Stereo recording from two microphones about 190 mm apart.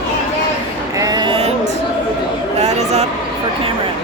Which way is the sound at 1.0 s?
20° right (ahead or behind).